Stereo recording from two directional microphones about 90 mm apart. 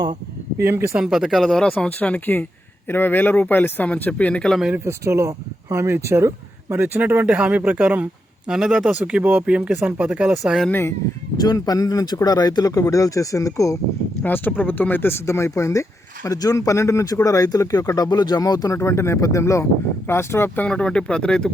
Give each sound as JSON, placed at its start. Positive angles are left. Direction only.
{"t": 0.6, "sound": "speech", "side_deg": -25}
{"t": 0.9, "sound": "speech", "side_deg": -5}
{"t": 4.9, "sound": "speech", "side_deg": -30}
{"t": 8.4, "sound": "speech", "side_deg": -5}
{"t": 10.7, "sound": "speech", "side_deg": 25}
{"t": 11.3, "sound": "speech", "side_deg": 45}
{"t": 14.3, "sound": "speech", "side_deg": 20}
{"t": 20.7, "sound": "speech", "side_deg": 10}